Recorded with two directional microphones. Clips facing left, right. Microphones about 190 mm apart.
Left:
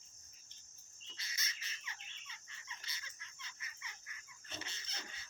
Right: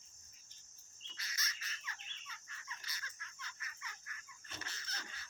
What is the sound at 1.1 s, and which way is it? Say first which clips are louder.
Fowl: right 2 dB; 25° left (ahead or behind).